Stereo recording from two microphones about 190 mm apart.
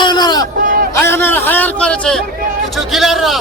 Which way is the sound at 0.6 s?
45° right (ahead or behind).